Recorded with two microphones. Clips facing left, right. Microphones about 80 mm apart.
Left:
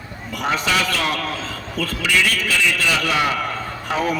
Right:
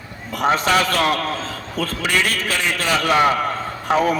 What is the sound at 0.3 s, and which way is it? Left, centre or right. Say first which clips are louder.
A man's voice: right 4 dB; right.